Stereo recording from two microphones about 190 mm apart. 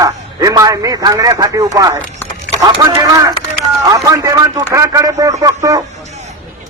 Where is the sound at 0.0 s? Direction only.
20° right (ahead or behind).